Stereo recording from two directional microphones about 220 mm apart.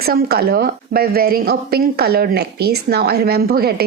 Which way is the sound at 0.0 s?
45° right (ahead or behind).